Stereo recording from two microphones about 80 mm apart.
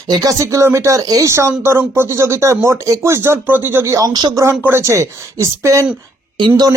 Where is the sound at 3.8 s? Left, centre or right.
Right.